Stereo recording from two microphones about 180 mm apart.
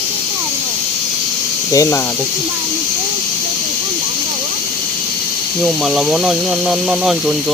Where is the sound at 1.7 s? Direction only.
20° left (ahead or behind).